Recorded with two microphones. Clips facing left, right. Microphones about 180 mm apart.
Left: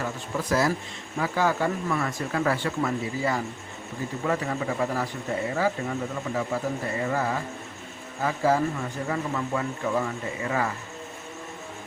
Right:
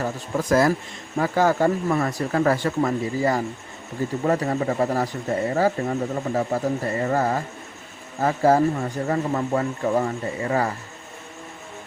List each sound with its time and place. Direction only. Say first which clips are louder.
0.0 s speech: right 4 dB; 45° right (ahead or behind)